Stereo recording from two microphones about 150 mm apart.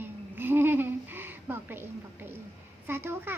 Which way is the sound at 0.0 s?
15° right (ahead or behind).